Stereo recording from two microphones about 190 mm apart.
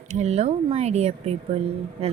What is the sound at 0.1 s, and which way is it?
A woman's voice, 35° right (ahead or behind).